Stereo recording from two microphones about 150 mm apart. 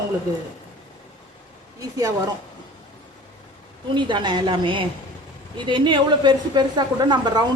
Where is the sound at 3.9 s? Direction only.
30° right (ahead or behind).